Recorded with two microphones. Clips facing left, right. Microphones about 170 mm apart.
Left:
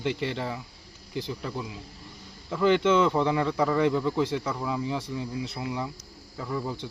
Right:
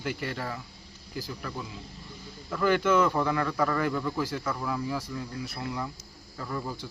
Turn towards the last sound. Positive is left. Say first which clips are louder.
# left 3 dB
turn(degrees=10)  # may be behind; listen again after turning